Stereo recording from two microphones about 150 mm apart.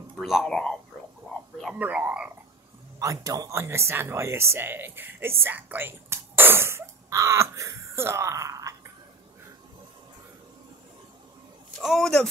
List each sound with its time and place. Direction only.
0.2 s a man's voice: centre (ahead or behind)
1.6 s speech: 5° right (ahead or behind)
3.0 s speech: 20° right (ahead or behind)
11.8 s a man's voice: centre (ahead or behind)